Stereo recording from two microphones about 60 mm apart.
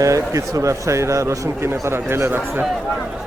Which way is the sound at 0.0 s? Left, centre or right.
Right.